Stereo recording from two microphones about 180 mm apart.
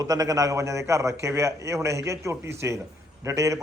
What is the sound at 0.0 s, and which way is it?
A man's voice, 20° right (ahead or behind).